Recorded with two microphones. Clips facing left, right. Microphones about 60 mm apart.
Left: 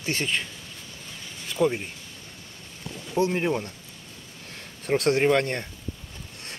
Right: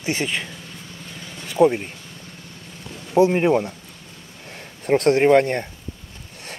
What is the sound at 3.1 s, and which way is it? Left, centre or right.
Speech, right.